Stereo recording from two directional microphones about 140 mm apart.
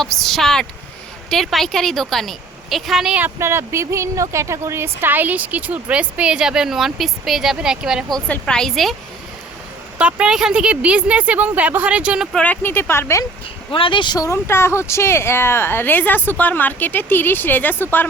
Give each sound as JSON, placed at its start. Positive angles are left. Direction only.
{"t": 0.0, "sound": "a woman's voice", "side_deg": 5}
{"t": 10.0, "sound": "a woman's voice", "side_deg": -10}
{"t": 12.4, "sound": "speech", "side_deg": 15}
{"t": 13.7, "sound": "speech", "side_deg": 40}
{"t": 14.3, "sound": "speech", "side_deg": 15}